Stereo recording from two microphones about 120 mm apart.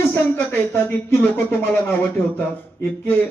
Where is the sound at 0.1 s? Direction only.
20° left (ahead or behind).